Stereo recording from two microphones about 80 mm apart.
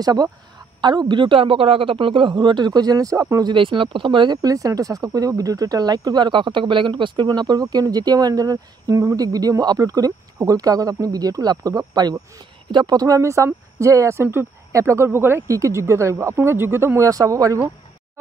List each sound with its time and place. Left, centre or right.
0.0 s speech: right
0.7 s a woman's voice: right
3.4 s speech: right
4.4 s speech: right
7.2 s speech: right
15.4 s speech: right
17.1 s speech: right